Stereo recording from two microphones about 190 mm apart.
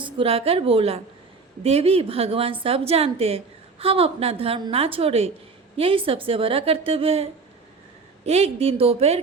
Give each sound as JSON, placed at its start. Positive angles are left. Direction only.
{"t": 0.0, "sound": "a woman's voice", "side_deg": -30}